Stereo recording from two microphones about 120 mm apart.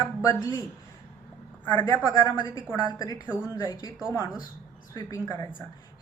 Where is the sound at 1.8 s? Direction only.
30° left (ahead or behind).